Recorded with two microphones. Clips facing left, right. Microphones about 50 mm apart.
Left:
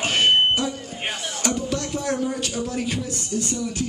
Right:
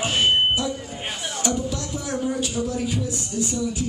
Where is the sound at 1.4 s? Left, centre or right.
Left.